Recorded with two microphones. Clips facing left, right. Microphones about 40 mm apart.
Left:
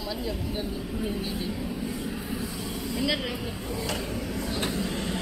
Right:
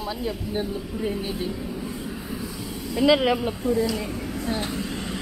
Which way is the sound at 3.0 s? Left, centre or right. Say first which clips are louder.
Right 12 dB; right.